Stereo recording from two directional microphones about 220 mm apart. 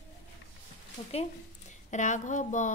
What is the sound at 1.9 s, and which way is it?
Speech, 35° left (ahead or behind).